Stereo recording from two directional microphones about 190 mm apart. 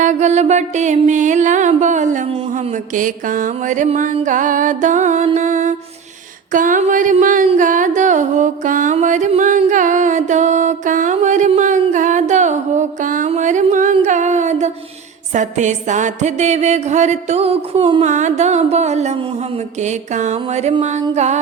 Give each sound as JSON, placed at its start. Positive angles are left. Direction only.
{"t": 0.0, "sound": "music", "side_deg": -40}
{"t": 18.0, "sound": "music", "side_deg": -40}